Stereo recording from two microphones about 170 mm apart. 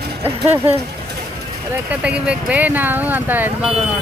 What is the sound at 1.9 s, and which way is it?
Speech, 5° right (ahead or behind).